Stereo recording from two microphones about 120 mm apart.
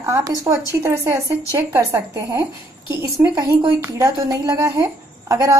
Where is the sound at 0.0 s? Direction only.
25° right (ahead or behind).